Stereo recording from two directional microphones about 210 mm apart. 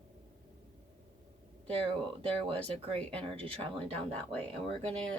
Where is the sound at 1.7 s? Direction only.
25° right (ahead or behind).